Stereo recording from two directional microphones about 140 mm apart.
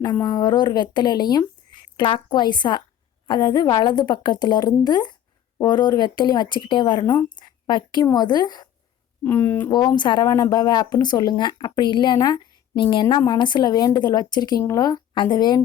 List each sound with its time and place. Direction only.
0.0 s a woman's voice: 30° left (ahead or behind)
9.2 s speech: 15° left (ahead or behind)
9.6 s speech: 30° left (ahead or behind)